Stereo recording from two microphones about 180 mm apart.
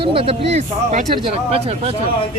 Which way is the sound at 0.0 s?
30° right (ahead or behind).